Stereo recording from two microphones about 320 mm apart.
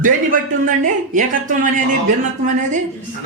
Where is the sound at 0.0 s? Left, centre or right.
Right.